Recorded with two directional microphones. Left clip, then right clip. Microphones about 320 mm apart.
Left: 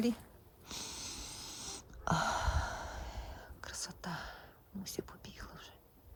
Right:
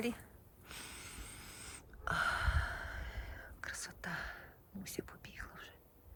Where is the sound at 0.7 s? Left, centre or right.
Centre.